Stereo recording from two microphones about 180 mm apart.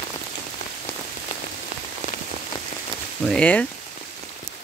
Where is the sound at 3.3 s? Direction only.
5° left (ahead or behind).